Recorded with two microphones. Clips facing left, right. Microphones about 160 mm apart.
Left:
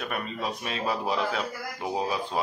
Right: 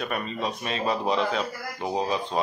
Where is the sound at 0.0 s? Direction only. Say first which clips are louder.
Right 3 dB; 5° left (ahead or behind).